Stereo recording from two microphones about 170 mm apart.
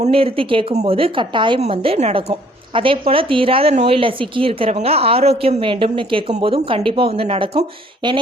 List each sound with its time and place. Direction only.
0.0 s speech: 35° right (ahead or behind)